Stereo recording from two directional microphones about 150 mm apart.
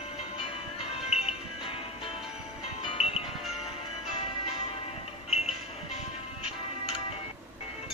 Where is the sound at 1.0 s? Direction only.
45° left (ahead or behind).